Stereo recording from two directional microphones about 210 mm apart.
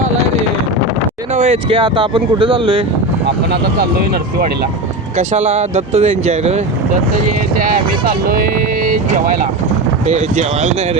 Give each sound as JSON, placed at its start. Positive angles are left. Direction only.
{"t": 1.4, "sound": "speech", "side_deg": -25}
{"t": 3.2, "sound": "speech", "side_deg": -50}
{"t": 5.1, "sound": "speech", "side_deg": -35}
{"t": 7.6, "sound": "speech", "side_deg": -40}